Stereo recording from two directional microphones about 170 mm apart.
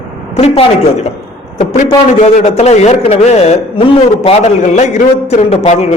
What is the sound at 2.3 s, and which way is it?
A man's voice, 40° left (ahead or behind).